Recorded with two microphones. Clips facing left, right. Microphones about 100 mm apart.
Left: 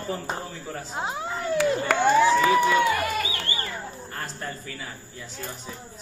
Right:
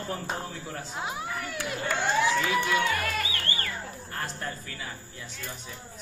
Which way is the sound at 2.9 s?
15° left (ahead or behind).